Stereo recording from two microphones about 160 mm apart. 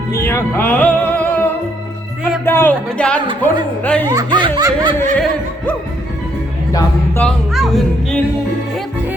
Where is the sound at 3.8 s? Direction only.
10° left (ahead or behind).